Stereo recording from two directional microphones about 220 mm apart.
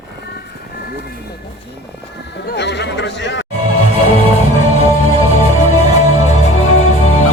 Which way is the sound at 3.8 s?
30° left (ahead or behind).